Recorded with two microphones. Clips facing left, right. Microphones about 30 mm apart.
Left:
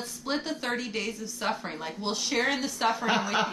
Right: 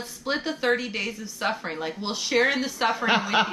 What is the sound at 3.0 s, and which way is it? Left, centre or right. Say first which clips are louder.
Speech: right 4 dB; right.